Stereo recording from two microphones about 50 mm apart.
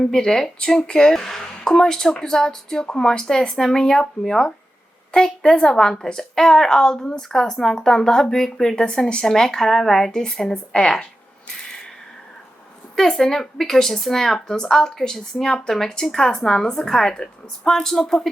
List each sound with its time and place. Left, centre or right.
0.0 s speech: centre
13.0 s speech: centre